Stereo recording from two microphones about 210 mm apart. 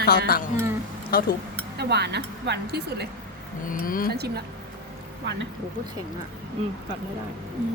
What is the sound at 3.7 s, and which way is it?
Speech, 40° left (ahead or behind).